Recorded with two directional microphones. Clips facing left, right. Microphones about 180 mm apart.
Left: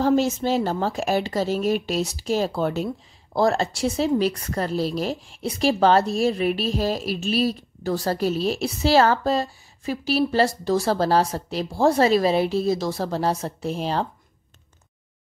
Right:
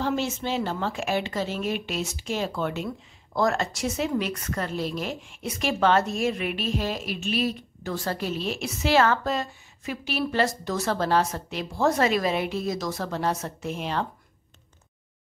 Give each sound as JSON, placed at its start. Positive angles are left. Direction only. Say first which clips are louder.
{"t": 0.0, "sound": "speech", "louder": "left 7 dB", "side_deg": 40}